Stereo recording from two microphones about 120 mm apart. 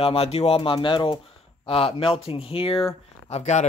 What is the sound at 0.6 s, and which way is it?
Speech, 45° left (ahead or behind).